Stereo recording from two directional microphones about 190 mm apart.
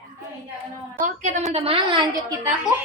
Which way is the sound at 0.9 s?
40° right (ahead or behind).